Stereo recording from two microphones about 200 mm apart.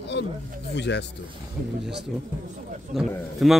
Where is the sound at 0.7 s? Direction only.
60° left (ahead or behind).